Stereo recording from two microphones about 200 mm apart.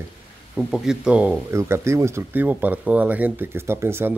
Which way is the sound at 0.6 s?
5° right (ahead or behind).